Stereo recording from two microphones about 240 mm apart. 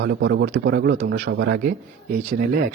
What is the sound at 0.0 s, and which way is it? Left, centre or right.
Speech, right.